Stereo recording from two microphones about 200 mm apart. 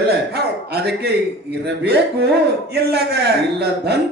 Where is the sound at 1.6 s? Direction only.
55° right (ahead or behind).